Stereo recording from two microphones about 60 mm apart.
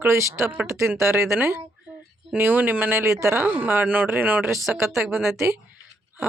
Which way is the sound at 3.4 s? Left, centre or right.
Right.